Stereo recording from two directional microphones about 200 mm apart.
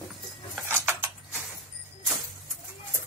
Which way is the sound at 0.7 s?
10° right (ahead or behind).